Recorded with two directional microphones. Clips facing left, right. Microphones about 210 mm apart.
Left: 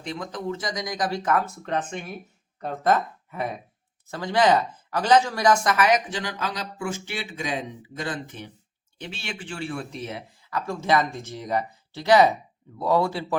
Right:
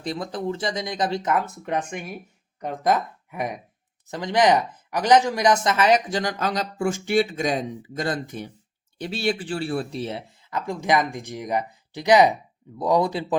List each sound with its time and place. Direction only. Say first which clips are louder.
0.0 s speech: right 3 dB; 35° right (ahead or behind)
6.1 s speech: right 5 dB; 40° right (ahead or behind)
10.7 s speech: right 1 dB; 15° right (ahead or behind)